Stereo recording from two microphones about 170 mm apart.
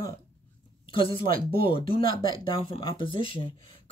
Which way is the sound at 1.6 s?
30° left (ahead or behind).